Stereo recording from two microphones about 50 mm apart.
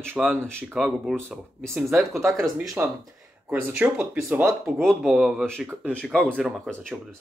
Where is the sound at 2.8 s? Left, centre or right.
Right.